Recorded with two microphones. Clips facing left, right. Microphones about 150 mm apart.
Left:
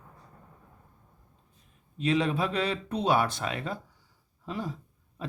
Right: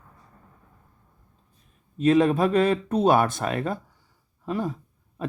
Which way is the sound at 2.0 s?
45° right (ahead or behind).